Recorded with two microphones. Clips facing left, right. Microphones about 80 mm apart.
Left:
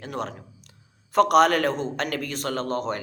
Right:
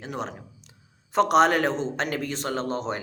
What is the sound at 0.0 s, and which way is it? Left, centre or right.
Speech, centre.